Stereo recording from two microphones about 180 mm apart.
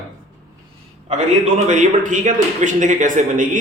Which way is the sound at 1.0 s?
40° right (ahead or behind).